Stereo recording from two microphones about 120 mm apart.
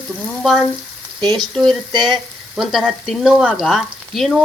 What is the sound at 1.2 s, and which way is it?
Speech, 35° right (ahead or behind).